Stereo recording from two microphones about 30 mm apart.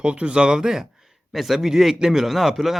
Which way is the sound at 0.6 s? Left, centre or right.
Centre.